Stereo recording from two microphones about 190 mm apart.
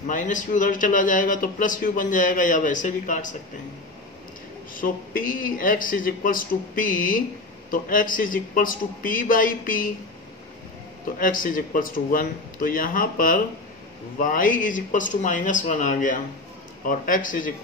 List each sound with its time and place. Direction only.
0.0 s a man's voice: 45° left (ahead or behind)
4.7 s a man's voice: 45° left (ahead or behind)
11.1 s a man's voice: 45° left (ahead or behind)